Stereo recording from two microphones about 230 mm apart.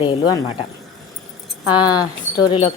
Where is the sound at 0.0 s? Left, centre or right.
Left.